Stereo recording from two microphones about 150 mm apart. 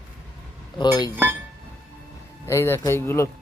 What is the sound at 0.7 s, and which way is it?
Speech, 30° left (ahead or behind).